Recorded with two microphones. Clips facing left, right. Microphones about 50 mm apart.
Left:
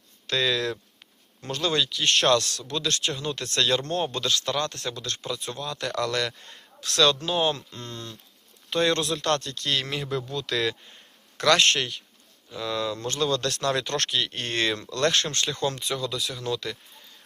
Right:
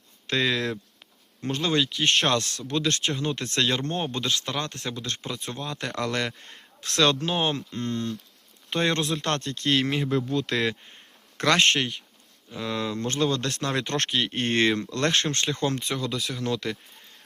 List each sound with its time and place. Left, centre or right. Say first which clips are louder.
0.3 s speech: even; right